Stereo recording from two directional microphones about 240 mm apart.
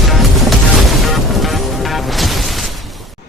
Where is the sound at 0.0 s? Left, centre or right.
Centre.